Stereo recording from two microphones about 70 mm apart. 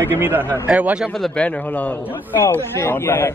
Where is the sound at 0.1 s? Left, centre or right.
Right.